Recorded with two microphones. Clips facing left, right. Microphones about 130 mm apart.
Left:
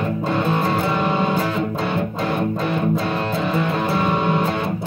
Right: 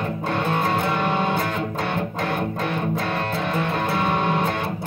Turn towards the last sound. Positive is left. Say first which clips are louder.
# left 2 dB
turn(degrees=0)  # may be behind; listen again after turning